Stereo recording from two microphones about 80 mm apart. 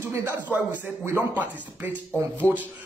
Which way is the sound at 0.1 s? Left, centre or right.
Right.